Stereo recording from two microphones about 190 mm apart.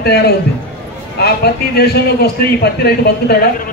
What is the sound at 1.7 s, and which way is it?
A man's voice, 55° left (ahead or behind).